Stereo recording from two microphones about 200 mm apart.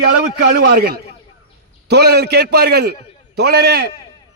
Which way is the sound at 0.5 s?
55° right (ahead or behind).